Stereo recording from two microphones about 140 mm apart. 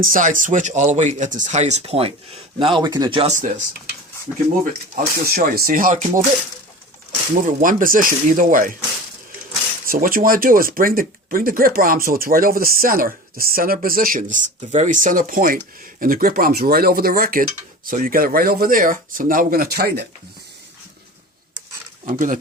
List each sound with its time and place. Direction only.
0.0 s speech: 70° right (ahead or behind); by 3.2 s 30° right (ahead or behind)
3.2 s speech: 60° right (ahead or behind)
4.6 s speech: 75° right (ahead or behind)
7.4 s speech: 75° right (ahead or behind)
9.8 s speech: 90° right
17.8 s speech: 80° right
22.0 s speech: 70° right (ahead or behind)